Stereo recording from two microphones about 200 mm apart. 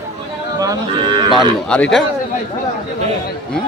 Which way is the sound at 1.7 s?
5° left (ahead or behind).